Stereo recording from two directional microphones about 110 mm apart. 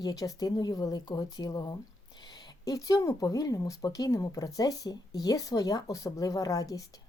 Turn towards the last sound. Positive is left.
turn(degrees=30)  # may be behind; listen again after turning